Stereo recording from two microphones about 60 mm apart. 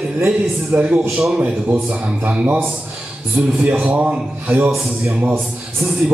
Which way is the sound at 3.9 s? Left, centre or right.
Right.